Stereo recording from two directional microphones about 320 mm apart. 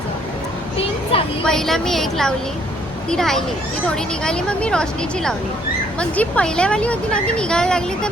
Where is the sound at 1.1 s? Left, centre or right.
Centre.